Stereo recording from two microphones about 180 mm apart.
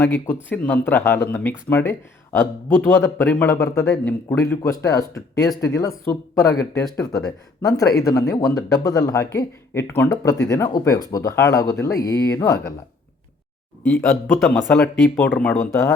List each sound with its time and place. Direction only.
0.0 s a man's voice: 10° left (ahead or behind)
6.9 s speech: 5° left (ahead or behind)
8.3 s speech: 20° left (ahead or behind)
13.8 s speech: centre (ahead or behind)